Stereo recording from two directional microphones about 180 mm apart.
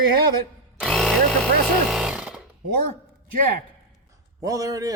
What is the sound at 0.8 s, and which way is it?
Drill, centre (ahead or behind).